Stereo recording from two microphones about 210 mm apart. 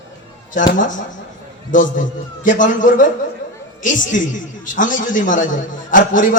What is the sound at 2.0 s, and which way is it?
Speech, 40° left (ahead or behind).